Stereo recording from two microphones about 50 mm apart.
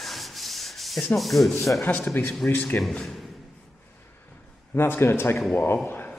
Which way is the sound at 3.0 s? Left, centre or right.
Centre.